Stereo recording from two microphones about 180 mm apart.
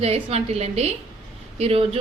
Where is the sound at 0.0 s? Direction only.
35° right (ahead or behind).